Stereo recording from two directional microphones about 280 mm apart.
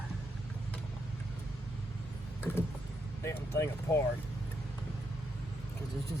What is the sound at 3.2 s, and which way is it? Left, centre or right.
Speech, centre.